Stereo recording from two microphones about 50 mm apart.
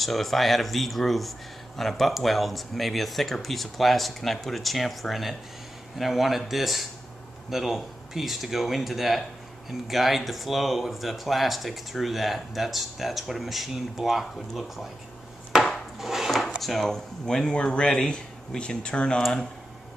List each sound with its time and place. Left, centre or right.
0.0 s speech: centre
16.0 s dishes: centre
16.5 s speech: centre
17.3 s speech: centre